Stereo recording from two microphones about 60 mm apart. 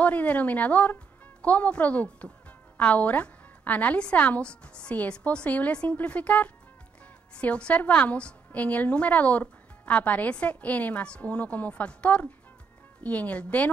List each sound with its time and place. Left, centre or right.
0.0 s a woman's voice: left